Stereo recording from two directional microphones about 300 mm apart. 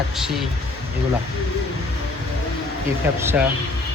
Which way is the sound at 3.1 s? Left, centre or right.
Centre.